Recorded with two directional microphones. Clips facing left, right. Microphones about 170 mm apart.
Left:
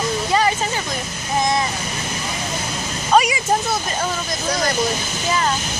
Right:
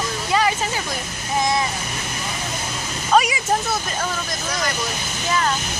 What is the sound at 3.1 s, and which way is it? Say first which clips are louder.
Speech: left 1 dB; centre (ahead or behind).